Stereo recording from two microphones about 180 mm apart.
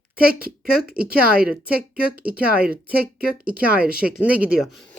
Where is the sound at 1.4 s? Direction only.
5° right (ahead or behind).